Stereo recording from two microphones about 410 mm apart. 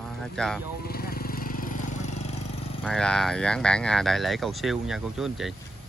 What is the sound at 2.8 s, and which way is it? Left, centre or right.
Speech, centre.